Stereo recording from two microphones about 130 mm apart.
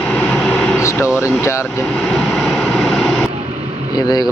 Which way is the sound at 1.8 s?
Centre (ahead or behind).